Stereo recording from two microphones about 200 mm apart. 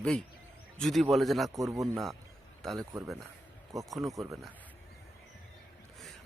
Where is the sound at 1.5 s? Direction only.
15° right (ahead or behind).